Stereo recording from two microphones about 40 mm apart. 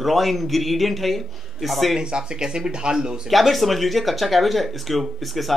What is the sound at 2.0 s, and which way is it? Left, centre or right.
A man's voice, right.